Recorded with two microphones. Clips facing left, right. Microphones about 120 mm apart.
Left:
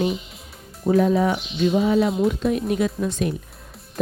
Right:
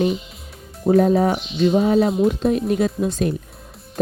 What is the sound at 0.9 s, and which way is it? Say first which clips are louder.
Speech: right 3 dB; 40° right (ahead or behind).